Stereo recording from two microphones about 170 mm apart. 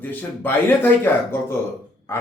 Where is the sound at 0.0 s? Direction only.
10° left (ahead or behind).